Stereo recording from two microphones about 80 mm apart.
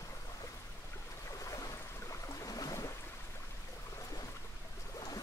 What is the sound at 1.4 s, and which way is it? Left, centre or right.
Boat, left.